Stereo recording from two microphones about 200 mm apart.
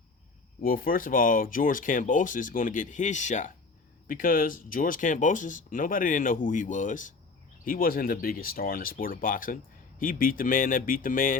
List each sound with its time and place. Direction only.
0.6 s speech: 45° left (ahead or behind)